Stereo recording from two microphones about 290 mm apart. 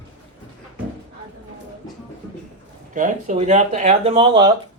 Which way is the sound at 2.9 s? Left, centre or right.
Right.